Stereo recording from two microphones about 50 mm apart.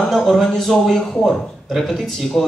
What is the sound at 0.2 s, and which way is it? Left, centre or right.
A man's voice, centre.